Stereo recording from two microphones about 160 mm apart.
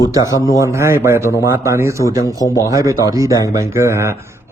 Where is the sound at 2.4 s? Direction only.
20° left (ahead or behind).